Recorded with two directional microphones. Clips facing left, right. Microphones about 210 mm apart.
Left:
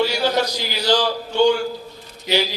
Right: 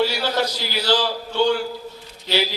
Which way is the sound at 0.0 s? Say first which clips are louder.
Left 2 dB; 15° left (ahead or behind).